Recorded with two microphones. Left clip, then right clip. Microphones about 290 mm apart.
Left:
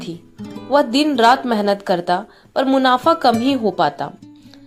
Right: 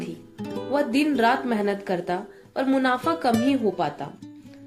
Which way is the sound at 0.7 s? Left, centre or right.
Left.